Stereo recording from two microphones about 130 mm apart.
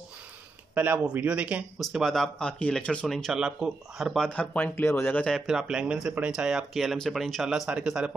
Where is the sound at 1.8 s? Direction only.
Centre (ahead or behind).